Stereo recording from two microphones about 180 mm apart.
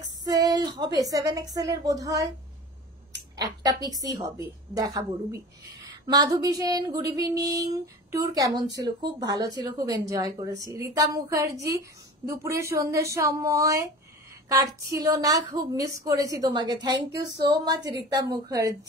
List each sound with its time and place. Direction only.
0.2 s a sound: 20° right (ahead or behind)
0.7 s a woman's voice: 20° right (ahead or behind)
3.3 s a woman's voice: 20° right (ahead or behind)